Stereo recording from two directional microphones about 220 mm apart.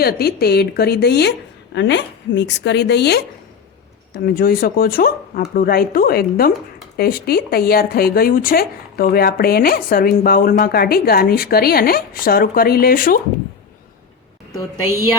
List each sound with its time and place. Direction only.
0.0 s speech: 45° left (ahead or behind)